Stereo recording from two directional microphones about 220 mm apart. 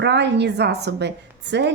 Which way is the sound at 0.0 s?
50° right (ahead or behind).